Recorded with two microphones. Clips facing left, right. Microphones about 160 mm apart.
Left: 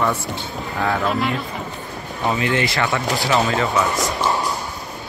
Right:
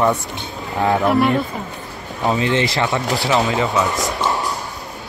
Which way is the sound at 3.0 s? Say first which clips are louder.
Right 1 dB; centre (ahead or behind).